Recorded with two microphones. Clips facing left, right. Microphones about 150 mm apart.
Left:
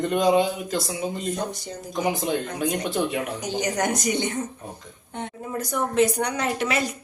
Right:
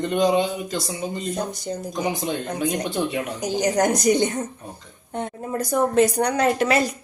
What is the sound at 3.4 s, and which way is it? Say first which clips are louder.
A woman's voice: right 7 dB; 40° right (ahead or behind).